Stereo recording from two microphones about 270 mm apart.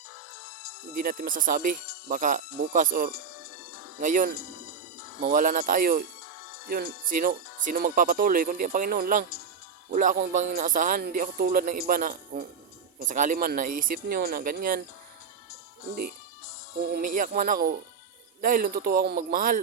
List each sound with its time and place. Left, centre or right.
0.9 s speech: right
16.8 s speech: right